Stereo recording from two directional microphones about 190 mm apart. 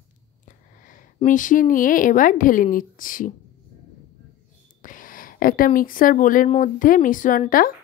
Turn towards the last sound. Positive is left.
turn(degrees=45)  # may be behind; listen again after turning